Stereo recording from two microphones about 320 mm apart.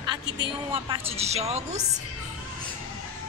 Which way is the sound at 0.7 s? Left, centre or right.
Centre.